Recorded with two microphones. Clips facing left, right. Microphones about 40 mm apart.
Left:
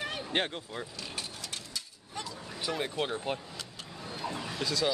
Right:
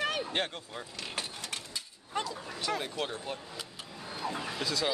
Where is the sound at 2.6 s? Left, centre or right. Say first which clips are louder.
Left 1 dB; centre.